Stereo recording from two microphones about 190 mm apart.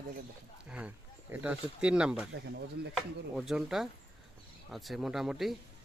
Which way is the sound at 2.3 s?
65° right (ahead or behind).